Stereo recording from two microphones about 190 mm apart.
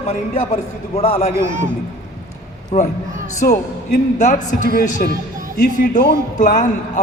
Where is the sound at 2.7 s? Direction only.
35° left (ahead or behind).